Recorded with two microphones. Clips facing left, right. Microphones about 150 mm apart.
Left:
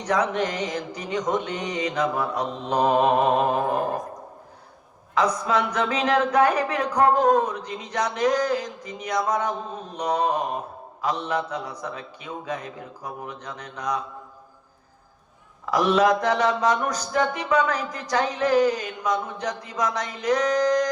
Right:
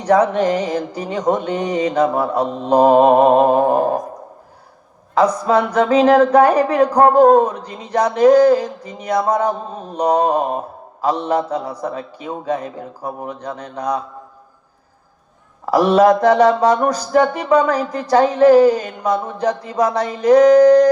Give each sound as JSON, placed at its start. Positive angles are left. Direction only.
{"t": 0.0, "sound": "music", "side_deg": -30}
{"t": 5.1, "sound": "music", "side_deg": -30}
{"t": 15.6, "sound": "music", "side_deg": -35}